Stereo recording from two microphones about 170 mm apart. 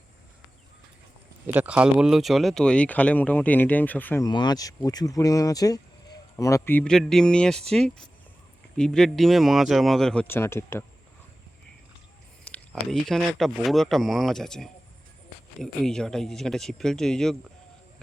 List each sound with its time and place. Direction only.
1.5 s speech: 10° right (ahead or behind); by 4.3 s 10° left (ahead or behind)
4.3 s speech: 25° left (ahead or behind)
12.5 s speech: 5° left (ahead or behind)